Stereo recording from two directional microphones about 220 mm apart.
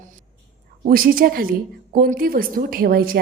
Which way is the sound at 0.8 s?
40° right (ahead or behind).